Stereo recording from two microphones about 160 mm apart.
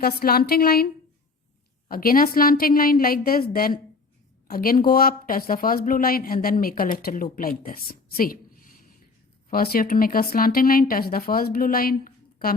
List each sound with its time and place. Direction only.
0.0 s a woman's voice: 75° left (ahead or behind)
1.9 s speech: 65° left (ahead or behind)